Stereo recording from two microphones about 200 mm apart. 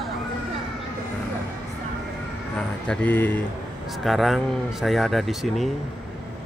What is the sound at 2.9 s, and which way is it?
Speech, 10° left (ahead or behind).